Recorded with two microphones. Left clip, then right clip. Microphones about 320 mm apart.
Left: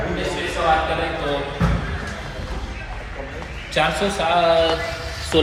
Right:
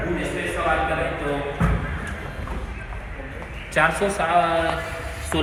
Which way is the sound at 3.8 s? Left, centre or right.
Centre.